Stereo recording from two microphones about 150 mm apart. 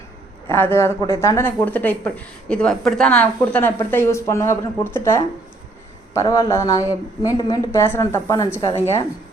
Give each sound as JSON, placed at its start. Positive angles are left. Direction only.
{"t": 0.5, "sound": "a woman's voice", "side_deg": 15}